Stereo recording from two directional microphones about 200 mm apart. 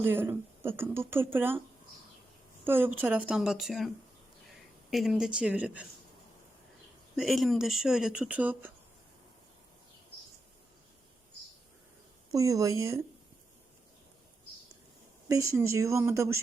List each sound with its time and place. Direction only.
0.0 s speech: 10° right (ahead or behind)
2.6 s speech: 10° right (ahead or behind)
7.2 s speech: centre (ahead or behind)
12.3 s speech: 15° right (ahead or behind)
15.3 s speech: 15° right (ahead or behind)